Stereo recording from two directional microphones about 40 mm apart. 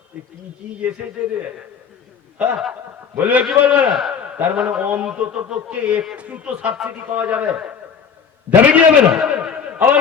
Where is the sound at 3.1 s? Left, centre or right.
Right.